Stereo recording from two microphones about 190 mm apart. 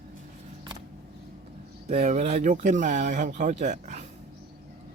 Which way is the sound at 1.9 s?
35° right (ahead or behind).